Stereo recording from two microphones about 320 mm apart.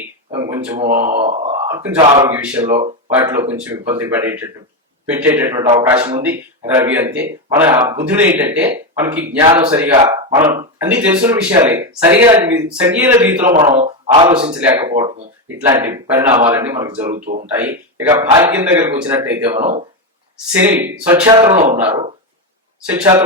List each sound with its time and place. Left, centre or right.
0.0 s a sound: centre
0.9 s speech: right
1.7 s speech: centre
2.6 s speech: right
3.1 s speech: centre
19.5 s speech: right
20.5 s speech: centre